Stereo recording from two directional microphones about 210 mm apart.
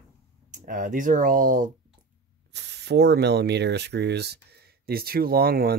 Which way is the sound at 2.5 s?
55° right (ahead or behind).